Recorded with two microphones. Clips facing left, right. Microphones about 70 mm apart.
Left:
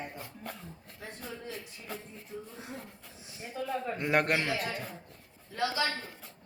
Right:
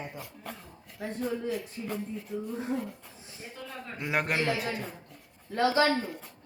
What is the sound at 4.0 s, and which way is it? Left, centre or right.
Speech, centre.